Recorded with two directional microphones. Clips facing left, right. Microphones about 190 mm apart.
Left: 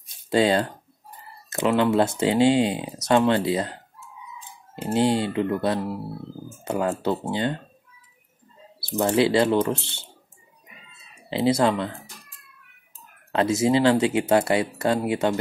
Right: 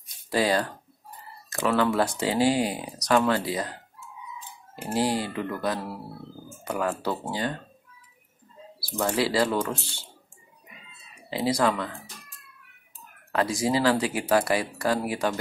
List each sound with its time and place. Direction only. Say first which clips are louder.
0.3 s speech: left 4 dB; 25° left (ahead or behind)
4.7 s speech: left 5 dB; 25° left (ahead or behind)
8.7 s speech: left 5 dB; 25° left (ahead or behind)
11.2 s speech: left 4 dB; 25° left (ahead or behind)
13.3 s speech: left 5 dB; 25° left (ahead or behind)